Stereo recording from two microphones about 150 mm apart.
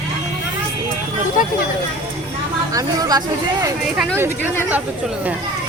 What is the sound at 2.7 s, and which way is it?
Speech, 25° right (ahead or behind).